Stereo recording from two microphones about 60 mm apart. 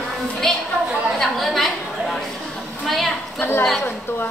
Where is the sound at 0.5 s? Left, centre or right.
Centre.